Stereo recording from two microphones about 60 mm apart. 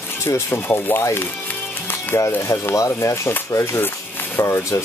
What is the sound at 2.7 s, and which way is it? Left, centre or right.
Speech, left.